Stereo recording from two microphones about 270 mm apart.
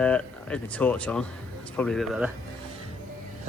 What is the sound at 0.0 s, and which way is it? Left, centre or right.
Speech, centre.